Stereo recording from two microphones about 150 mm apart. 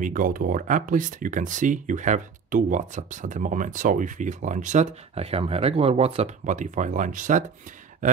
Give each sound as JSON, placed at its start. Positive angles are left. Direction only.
{"t": 0.0, "sound": "speech", "side_deg": -65}